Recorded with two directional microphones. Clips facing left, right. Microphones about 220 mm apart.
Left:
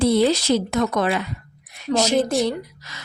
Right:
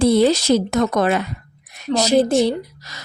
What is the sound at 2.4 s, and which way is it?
Speech, 40° right (ahead or behind).